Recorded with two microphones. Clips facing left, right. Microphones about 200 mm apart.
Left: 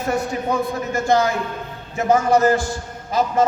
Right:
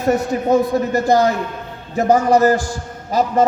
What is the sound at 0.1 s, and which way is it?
A man's voice, 35° right (ahead or behind).